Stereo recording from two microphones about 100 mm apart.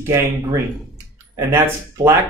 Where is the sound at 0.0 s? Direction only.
30° right (ahead or behind).